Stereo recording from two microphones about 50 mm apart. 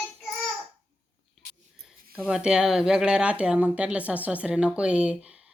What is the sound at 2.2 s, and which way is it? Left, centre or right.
Speech, centre.